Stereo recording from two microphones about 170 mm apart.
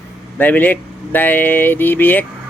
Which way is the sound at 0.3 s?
10° left (ahead or behind).